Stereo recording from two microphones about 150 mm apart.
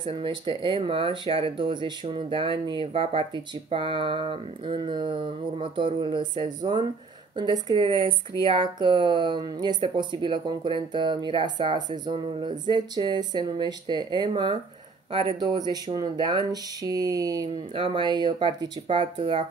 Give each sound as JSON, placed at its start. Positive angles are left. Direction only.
{"t": 0.0, "sound": "speech", "side_deg": -35}